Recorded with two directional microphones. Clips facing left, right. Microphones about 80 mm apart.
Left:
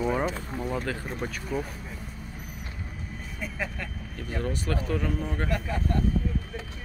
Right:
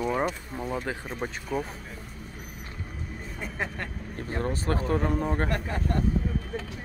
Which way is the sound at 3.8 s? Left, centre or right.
Right.